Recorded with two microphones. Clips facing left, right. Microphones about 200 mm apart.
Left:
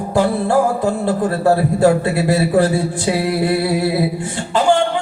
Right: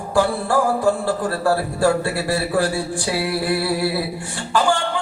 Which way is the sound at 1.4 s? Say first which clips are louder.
Left 5 dB; 20° left (ahead or behind).